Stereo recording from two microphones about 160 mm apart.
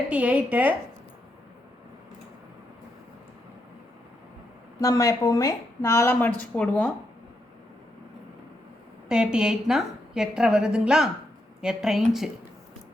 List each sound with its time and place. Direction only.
0.1 s a woman's voice: 10° right (ahead or behind)
4.8 s speech: 20° left (ahead or behind)
9.0 s a woman's voice: 5° right (ahead or behind)